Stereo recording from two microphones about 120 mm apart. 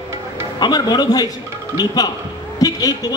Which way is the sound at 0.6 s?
35° left (ahead or behind).